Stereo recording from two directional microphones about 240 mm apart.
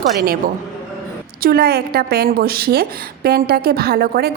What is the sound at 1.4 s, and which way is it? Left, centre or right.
A woman's voice, right.